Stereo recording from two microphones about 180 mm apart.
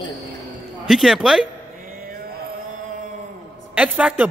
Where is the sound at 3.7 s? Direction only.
5° right (ahead or behind).